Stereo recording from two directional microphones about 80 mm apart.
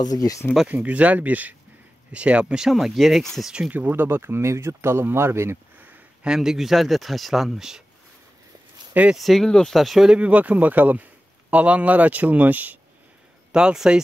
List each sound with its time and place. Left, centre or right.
0.0 s speech: left
0.7 s speech: centre
3.7 s speech: right
6.2 s speech: centre
9.1 s speech: centre
10.1 s speech: centre
13.5 s speech: centre